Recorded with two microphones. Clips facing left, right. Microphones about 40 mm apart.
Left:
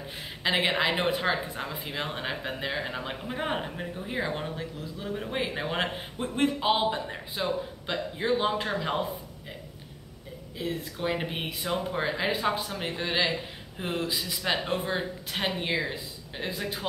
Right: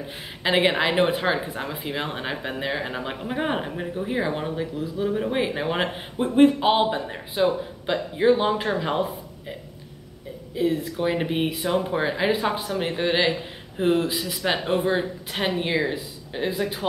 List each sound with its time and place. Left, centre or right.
0.4 s speech: centre
10.5 s speech: centre